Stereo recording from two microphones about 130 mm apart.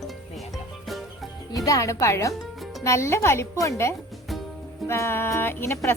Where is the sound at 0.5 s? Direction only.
Centre (ahead or behind).